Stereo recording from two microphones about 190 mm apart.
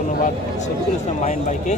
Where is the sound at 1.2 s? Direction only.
40° left (ahead or behind).